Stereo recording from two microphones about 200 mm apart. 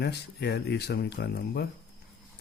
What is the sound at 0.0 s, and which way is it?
Speech, 55° left (ahead or behind).